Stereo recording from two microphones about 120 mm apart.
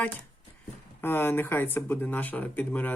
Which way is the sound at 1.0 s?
20° left (ahead or behind).